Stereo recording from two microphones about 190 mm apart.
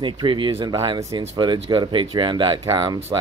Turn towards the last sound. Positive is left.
turn(degrees=-25)  # may be behind; listen again after turning